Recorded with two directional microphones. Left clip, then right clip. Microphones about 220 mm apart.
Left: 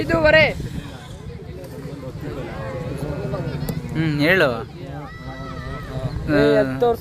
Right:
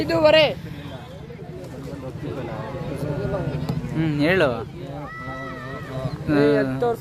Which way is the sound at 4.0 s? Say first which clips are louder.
Left 3 dB; centre (ahead or behind).